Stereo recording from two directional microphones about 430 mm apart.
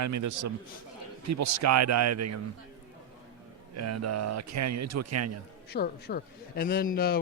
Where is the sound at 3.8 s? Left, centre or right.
Right.